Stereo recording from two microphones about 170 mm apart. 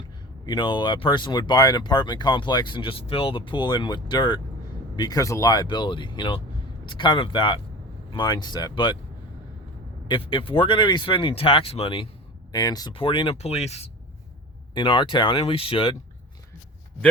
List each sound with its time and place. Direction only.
0.4 s speech: 25° left (ahead or behind)
10.1 s speech: 30° left (ahead or behind)
14.8 s speech: 25° left (ahead or behind)